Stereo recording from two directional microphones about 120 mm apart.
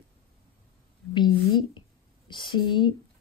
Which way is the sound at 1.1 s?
40° left (ahead or behind).